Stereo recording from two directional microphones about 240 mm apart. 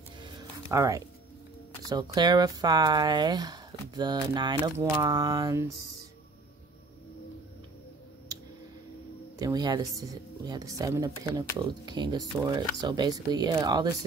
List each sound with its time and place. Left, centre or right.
0.7 s speech: centre
9.4 s speech: centre